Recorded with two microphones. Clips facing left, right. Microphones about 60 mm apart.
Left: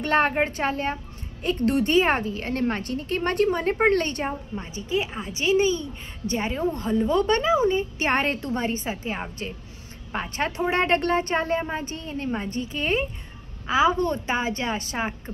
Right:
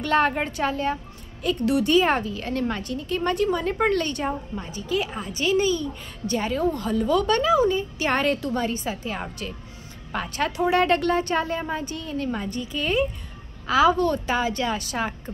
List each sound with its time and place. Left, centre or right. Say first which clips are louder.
0.0 s a woman's voice: even; left
4.6 s a woman's voice: even; left